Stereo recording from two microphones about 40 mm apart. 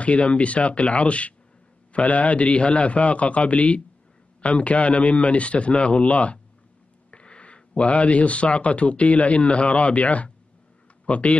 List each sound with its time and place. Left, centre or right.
0.0 s a man's voice: left